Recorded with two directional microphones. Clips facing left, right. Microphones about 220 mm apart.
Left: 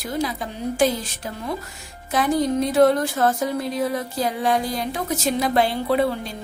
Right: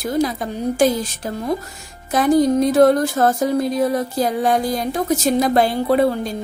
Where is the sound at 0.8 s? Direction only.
40° right (ahead or behind).